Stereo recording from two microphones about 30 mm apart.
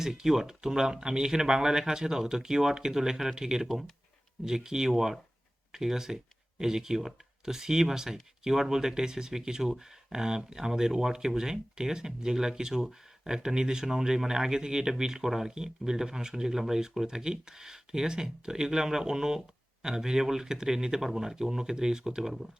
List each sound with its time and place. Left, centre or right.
0.2 s speech: centre